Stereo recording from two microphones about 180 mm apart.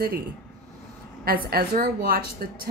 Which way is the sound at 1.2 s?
55° right (ahead or behind).